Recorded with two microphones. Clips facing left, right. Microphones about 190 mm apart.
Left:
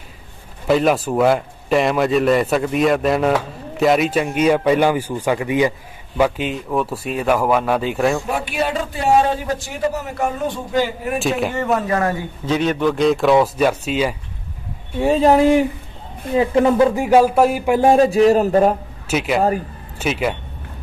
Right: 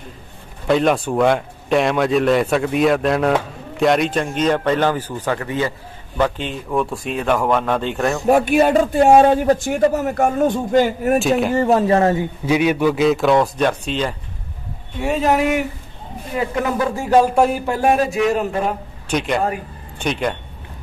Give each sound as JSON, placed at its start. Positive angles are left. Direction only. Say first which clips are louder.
{"t": 0.7, "sound": "a man's voice", "louder": "even", "side_deg": 0}
{"t": 8.3, "sound": "a man's voice", "louder": "right 8 dB", "side_deg": -45}
{"t": 11.1, "sound": "a man's voice", "louder": "right 1 dB", "side_deg": 0}
{"t": 11.5, "sound": "speech", "louder": "right 4 dB", "side_deg": -30}
{"t": 12.4, "sound": "a man's voice", "louder": "right 1 dB", "side_deg": -10}
{"t": 15.0, "sound": "a man's voice", "louder": "left 4 dB", "side_deg": 30}
{"t": 17.6, "sound": "a man's voice", "louder": "left 4 dB", "side_deg": 20}
{"t": 19.0, "sound": "a man's voice", "louder": "left 2 dB", "side_deg": 5}